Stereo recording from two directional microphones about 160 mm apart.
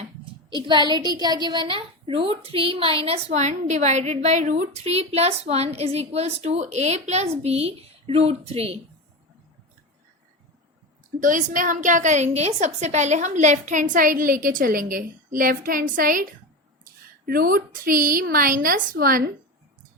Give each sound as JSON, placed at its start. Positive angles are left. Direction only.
{"t": 0.5, "sound": "a woman's voice", "side_deg": -30}
{"t": 11.2, "sound": "a woman's voice", "side_deg": -55}
{"t": 17.2, "sound": "a woman's voice", "side_deg": -65}